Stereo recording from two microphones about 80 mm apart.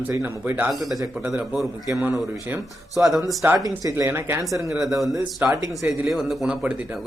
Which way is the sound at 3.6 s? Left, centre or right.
Right.